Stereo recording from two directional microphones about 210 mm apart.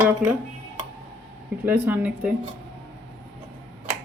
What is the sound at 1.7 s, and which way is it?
Speech, 10° right (ahead or behind).